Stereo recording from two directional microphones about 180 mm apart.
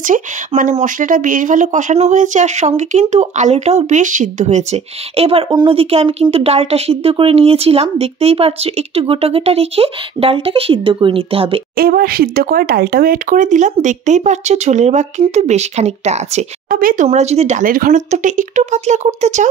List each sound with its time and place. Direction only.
0.0 s speech: 45° right (ahead or behind); by 11.6 s 30° right (ahead or behind)
11.7 s speech: 55° right (ahead or behind); by 16.4 s 40° right (ahead or behind)
16.6 s speech: 50° right (ahead or behind)